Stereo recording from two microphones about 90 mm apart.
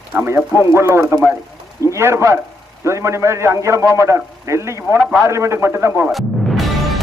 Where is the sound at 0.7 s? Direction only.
30° right (ahead or behind).